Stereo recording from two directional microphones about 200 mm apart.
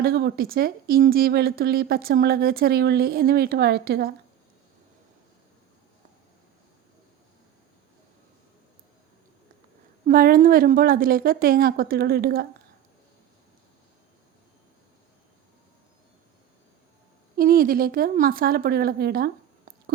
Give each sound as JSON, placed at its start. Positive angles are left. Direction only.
{"t": 0.0, "sound": "a woman's voice", "side_deg": -50}
{"t": 10.1, "sound": "a woman's voice", "side_deg": -45}
{"t": 17.3, "sound": "a woman's voice", "side_deg": -45}